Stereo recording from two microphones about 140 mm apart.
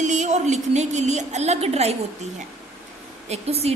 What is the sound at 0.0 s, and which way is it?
A woman's voice, 55° right (ahead or behind).